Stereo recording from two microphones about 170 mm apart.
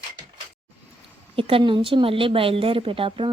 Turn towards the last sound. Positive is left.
turn(degrees=-30)  # may be behind; listen again after turning